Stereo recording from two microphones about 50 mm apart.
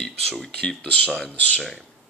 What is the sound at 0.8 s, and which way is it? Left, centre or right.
Speech, left.